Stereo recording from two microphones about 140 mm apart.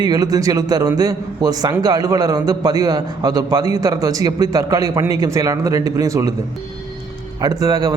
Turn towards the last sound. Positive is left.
turn(degrees=-25)  # may be behind; listen again after turning